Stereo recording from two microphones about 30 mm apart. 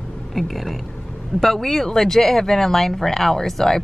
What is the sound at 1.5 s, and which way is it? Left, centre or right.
A man's voice, centre.